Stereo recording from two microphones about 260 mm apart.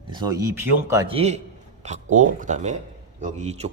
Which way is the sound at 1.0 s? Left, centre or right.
Right.